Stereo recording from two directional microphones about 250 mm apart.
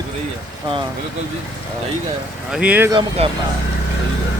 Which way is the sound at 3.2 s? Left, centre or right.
Right.